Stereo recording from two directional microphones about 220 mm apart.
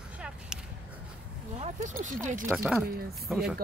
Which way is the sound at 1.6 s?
35° right (ahead or behind).